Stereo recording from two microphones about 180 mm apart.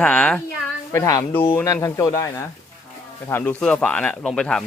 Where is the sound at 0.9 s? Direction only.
15° left (ahead or behind).